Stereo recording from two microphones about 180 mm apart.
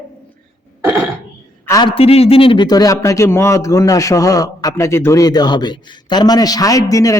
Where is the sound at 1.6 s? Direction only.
20° left (ahead or behind).